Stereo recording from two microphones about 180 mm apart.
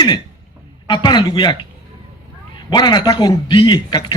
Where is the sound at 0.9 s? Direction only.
25° left (ahead or behind).